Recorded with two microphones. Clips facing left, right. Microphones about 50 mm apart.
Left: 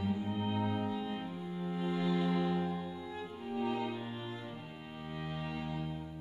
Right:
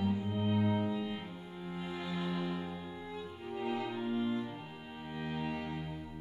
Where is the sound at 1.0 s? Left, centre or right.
Centre.